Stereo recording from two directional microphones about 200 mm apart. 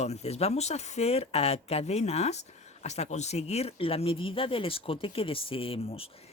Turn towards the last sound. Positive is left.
turn(degrees=30)  # may be behind; listen again after turning